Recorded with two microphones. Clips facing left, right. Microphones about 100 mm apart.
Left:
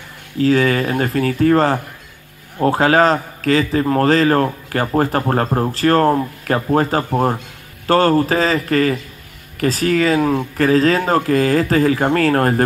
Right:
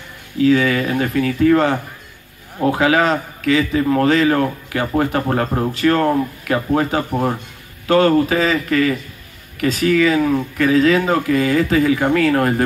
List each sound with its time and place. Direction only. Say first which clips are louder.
0.4 s a man's voice: even; 40° left (ahead or behind)